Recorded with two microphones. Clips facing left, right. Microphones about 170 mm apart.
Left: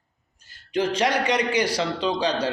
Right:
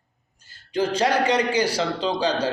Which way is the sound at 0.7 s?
30° right (ahead or behind).